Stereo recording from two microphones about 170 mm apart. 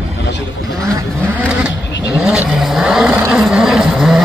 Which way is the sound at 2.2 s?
5° right (ahead or behind).